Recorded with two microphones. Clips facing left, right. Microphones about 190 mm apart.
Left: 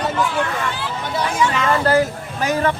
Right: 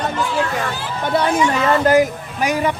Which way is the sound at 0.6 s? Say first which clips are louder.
Even; 40° right (ahead or behind).